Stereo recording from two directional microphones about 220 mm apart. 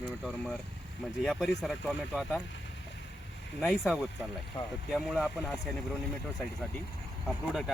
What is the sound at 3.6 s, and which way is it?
Speech, centre (ahead or behind).